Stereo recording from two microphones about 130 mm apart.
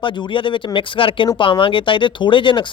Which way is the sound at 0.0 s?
40° left (ahead or behind).